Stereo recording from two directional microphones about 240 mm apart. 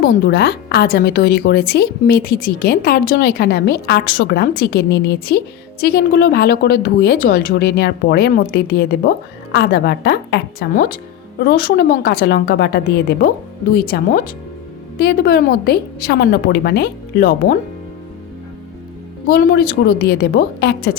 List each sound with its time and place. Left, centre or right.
0.0 s a woman's voice: left
19.3 s a woman's voice: left